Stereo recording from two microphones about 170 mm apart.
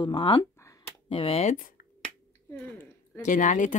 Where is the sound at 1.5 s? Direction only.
55° left (ahead or behind).